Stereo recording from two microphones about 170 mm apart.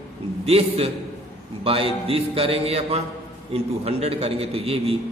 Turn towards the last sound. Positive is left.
turn(degrees=-35)  # may be behind; listen again after turning